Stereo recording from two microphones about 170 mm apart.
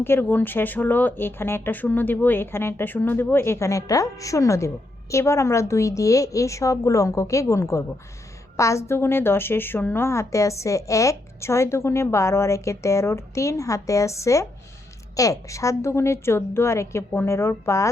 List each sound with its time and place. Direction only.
0.0 s a woman's voice: 15° left (ahead or behind)